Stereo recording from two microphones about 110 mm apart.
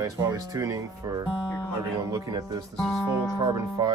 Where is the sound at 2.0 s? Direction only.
35° right (ahead or behind).